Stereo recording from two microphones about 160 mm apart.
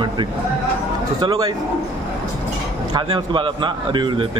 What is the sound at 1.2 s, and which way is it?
Speech, 25° right (ahead or behind).